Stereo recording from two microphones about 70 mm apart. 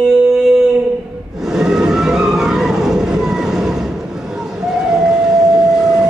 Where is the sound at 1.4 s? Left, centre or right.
Centre.